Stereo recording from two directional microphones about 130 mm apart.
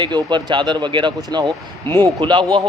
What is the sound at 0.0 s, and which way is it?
Speech, 35° right (ahead or behind).